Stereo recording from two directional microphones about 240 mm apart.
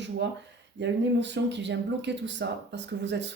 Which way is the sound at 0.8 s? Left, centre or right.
Right.